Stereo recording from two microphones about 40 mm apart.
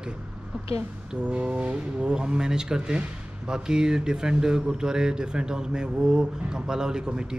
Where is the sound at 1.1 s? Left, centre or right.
Right.